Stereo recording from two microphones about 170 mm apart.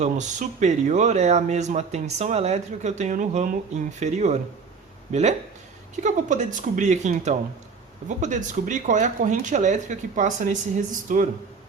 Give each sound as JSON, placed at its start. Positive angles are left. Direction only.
{"t": 0.0, "sound": "speech", "side_deg": -45}